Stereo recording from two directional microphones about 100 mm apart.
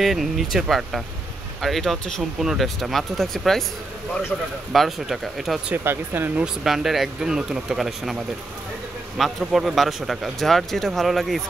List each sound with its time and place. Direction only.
0.0 s speech: centre (ahead or behind)
4.7 s speech: centre (ahead or behind)
5.9 s speech: 20° right (ahead or behind)
6.4 s speech: 5° right (ahead or behind)
9.2 s speech: centre (ahead or behind)